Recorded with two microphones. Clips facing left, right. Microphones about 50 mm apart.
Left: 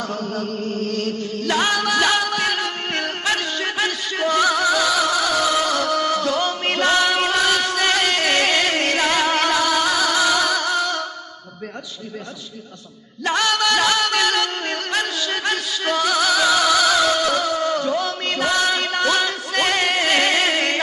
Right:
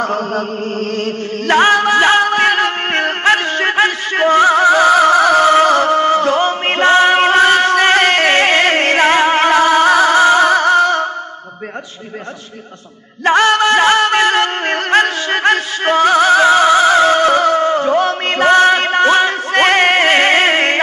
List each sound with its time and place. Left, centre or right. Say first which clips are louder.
0.0 s chant: right 8 dB; right
13.2 s music: right 9 dB; right